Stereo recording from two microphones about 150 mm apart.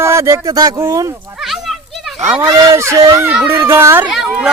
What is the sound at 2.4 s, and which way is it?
Speech, 25° right (ahead or behind).